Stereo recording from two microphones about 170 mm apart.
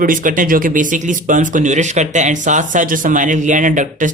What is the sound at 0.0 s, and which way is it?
Speech, 55° right (ahead or behind).